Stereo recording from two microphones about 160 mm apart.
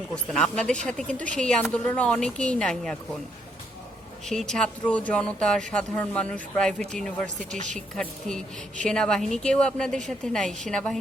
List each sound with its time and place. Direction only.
0.1 s a woman's voice: 5° left (ahead or behind)
4.3 s speech: 5° left (ahead or behind)
7.6 s a woman's voice: 50° right (ahead or behind)
7.9 s speech: 5° left (ahead or behind)